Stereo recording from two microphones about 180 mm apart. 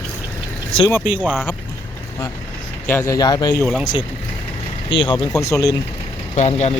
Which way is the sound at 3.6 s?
5° right (ahead or behind).